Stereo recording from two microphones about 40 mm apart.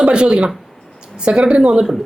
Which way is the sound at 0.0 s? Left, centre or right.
Right.